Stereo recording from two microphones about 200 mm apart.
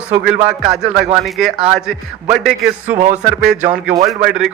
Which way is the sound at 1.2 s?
Centre (ahead or behind).